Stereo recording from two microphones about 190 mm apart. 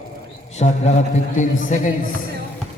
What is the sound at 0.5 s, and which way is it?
A man's voice, 35° left (ahead or behind).